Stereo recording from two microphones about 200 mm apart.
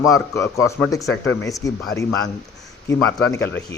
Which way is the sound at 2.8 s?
5° left (ahead or behind).